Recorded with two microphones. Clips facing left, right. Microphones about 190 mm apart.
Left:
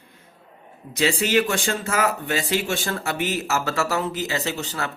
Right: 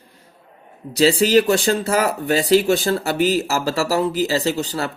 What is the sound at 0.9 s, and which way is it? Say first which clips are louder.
Speech: right 6 dB; 35° right (ahead or behind).